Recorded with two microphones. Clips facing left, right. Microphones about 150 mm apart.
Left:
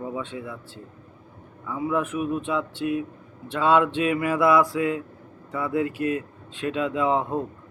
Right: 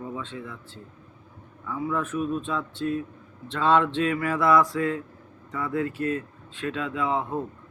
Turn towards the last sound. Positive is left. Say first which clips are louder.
# left 4 dB
turn(degrees=15)  # may be behind; listen again after turning